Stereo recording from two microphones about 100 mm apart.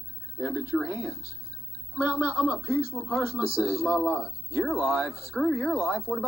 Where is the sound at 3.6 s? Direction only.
15° right (ahead or behind).